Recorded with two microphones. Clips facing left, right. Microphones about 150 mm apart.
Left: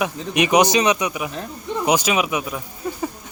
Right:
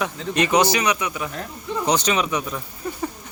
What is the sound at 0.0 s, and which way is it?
Speech, 15° left (ahead or behind).